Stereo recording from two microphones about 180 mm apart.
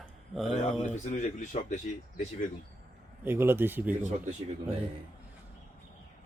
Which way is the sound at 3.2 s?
15° right (ahead or behind).